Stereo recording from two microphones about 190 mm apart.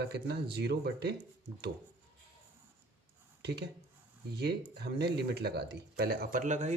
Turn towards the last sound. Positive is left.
turn(degrees=-40)  # may be behind; listen again after turning